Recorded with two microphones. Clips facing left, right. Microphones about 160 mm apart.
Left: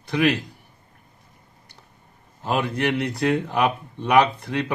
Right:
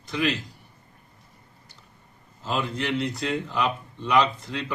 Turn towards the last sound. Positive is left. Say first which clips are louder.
# left 5 dB
turn(degrees=60)  # may be behind; listen again after turning